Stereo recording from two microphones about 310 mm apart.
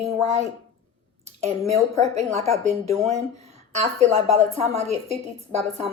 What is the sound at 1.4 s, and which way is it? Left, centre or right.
A woman's voice, right.